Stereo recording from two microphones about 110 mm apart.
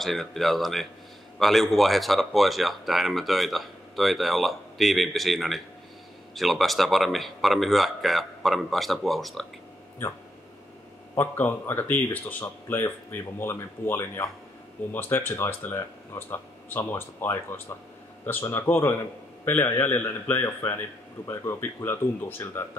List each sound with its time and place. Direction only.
0.0 s speech: centre (ahead or behind)
11.1 s speech: 20° left (ahead or behind)